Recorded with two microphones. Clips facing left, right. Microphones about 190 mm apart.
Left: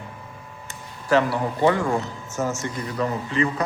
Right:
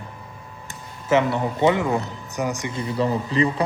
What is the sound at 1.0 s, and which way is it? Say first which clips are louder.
Speech: right 1 dB; 20° right (ahead or behind).